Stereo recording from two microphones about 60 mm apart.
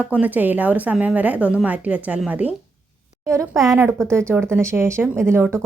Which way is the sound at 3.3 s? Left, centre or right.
Right.